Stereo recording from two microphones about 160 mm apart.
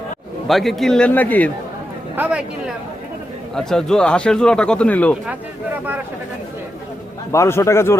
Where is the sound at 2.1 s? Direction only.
10° right (ahead or behind).